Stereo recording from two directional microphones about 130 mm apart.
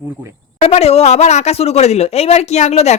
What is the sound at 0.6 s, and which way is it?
Speech, 55° left (ahead or behind).